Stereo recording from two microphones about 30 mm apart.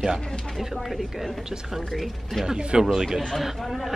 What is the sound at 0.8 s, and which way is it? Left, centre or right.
Speech, centre.